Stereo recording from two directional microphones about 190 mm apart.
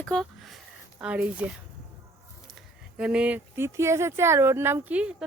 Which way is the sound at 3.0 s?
5° right (ahead or behind).